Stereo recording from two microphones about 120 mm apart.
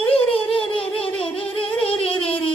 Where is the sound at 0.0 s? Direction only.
50° left (ahead or behind).